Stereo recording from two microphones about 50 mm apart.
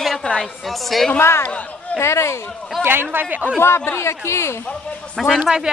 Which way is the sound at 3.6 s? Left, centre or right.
Left.